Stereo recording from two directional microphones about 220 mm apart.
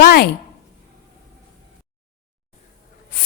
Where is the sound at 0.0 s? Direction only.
45° left (ahead or behind).